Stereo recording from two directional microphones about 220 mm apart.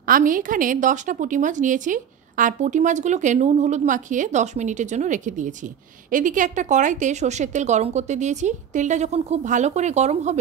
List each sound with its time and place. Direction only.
0.0 s a woman's voice: 40° right (ahead or behind)